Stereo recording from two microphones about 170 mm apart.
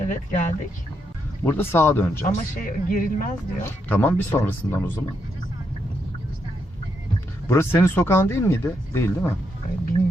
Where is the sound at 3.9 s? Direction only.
10° left (ahead or behind).